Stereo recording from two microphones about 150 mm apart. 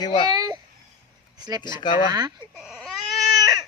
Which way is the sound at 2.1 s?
25° right (ahead or behind).